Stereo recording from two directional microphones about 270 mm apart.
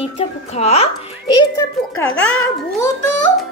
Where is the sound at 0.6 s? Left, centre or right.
Left.